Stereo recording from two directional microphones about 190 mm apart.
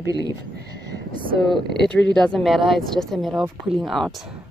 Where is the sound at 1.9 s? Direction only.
5° left (ahead or behind).